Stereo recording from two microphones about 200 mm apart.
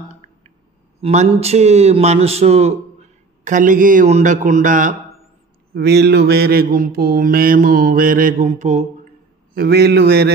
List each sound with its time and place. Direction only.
1.0 s speech: 30° right (ahead or behind)
5.8 s mantra: 55° right (ahead or behind); by 8.8 s 35° right (ahead or behind)
9.5 s mantra: 50° right (ahead or behind)